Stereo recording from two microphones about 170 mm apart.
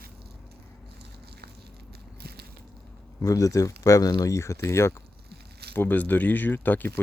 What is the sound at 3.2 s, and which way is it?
Speech, 20° left (ahead or behind).